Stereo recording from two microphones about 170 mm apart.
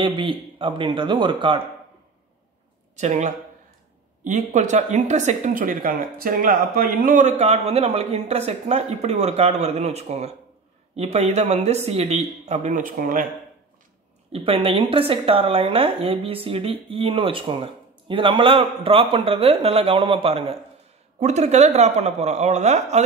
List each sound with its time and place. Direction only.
0.0 s speech: 30° right (ahead or behind)
3.0 s speech: 45° right (ahead or behind)
14.3 s speech: 35° right (ahead or behind)